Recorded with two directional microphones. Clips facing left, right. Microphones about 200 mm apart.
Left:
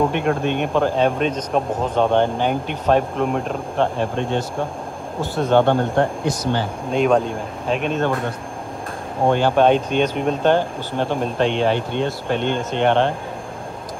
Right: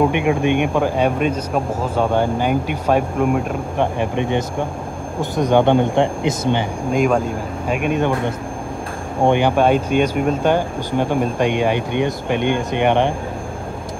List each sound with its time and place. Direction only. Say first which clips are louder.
0.1 s speech: right 3 dB; 10° right (ahead or behind)
6.9 s speech: even; 10° right (ahead or behind)
9.3 s speech: even; 10° right (ahead or behind)